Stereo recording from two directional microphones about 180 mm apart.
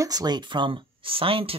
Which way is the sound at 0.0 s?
20° right (ahead or behind).